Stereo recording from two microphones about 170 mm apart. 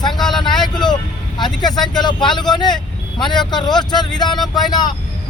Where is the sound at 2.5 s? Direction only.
25° left (ahead or behind).